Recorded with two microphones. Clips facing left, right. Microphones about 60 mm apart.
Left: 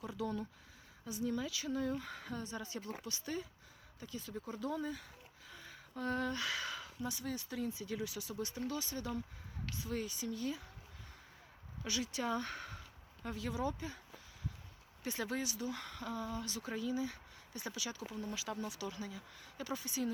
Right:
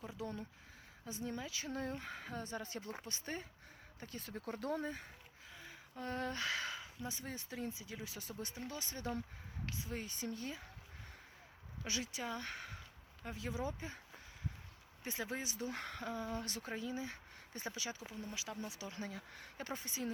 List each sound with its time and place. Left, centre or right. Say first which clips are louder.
0.2 s speech: left 6 dB; right
5.5 s a sound: even; right
6.0 s speech: left 3 dB; right
11.8 s speech: left 3 dB; right
12.2 s speech: left 5 dB; centre
13.2 s speech: left 3 dB; right
15.0 s speech: left 3 dB; right
15.5 s speech: left 1 dB; right
16.0 s speech: left 2 dB; right
16.3 s speech: left 1 dB; right
19.1 s speech: even; right